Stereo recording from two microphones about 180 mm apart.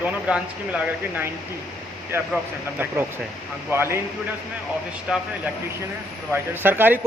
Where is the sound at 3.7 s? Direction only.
15° right (ahead or behind).